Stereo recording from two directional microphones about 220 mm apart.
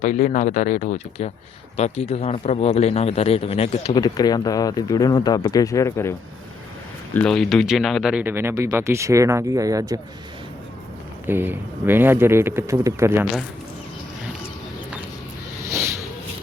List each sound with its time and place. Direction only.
0.0 s speech: 35° left (ahead or behind); by 10.0 s 15° right (ahead or behind)
11.3 s speech: 10° right (ahead or behind)